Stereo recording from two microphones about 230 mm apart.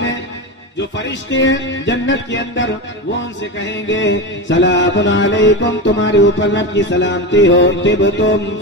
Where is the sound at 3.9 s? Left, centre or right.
Left.